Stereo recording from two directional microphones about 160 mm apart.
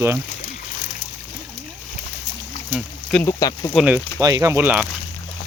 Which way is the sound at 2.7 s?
5° left (ahead or behind).